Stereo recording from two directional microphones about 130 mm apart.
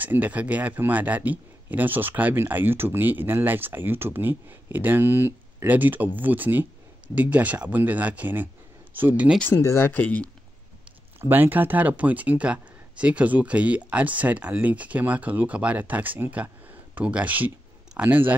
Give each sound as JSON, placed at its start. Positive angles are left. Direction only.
{"t": 0.0, "sound": "speech", "side_deg": -15}
{"t": 9.4, "sound": "speech", "side_deg": 20}
{"t": 11.1, "sound": "speech", "side_deg": -15}